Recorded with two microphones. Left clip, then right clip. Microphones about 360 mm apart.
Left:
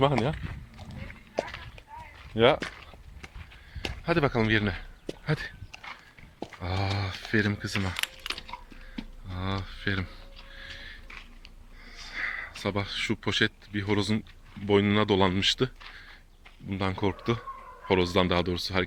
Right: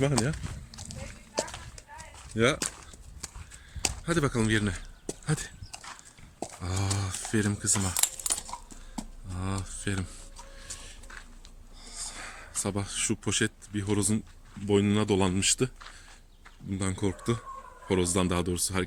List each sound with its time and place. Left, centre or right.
1.4 s run: centre
2.4 s speech: centre
3.8 s a sound: centre
6.6 s speech: centre
7.9 s keys jangling: centre
9.3 s speech: centre
11.9 s speech: centre